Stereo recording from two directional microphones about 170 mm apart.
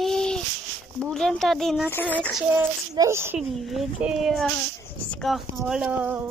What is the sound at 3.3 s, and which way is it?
A child's voice, 5° right (ahead or behind).